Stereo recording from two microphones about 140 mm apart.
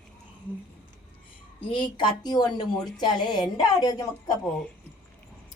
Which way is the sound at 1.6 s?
35° left (ahead or behind).